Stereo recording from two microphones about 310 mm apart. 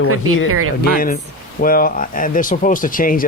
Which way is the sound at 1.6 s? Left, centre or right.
Left.